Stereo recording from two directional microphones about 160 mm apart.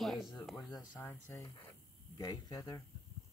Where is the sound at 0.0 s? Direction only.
Centre (ahead or behind).